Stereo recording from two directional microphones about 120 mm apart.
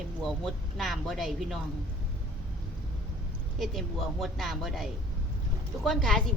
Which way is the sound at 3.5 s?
Centre (ahead or behind).